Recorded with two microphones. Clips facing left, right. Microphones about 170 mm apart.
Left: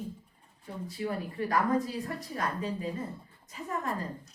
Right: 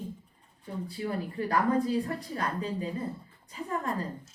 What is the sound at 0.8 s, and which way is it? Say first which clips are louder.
A woman's voice: even; 30° right (ahead or behind).